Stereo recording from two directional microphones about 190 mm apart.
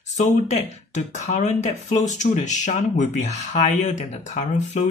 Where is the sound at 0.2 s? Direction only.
35° left (ahead or behind).